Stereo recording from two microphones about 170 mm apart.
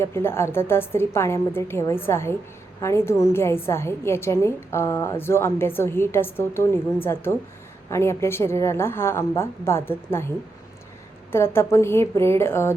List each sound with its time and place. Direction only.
0.0 s a woman's voice: 15° left (ahead or behind)
11.3 s a woman's voice: 15° left (ahead or behind)